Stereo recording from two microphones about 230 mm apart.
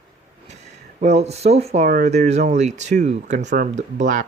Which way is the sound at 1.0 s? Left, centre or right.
Right.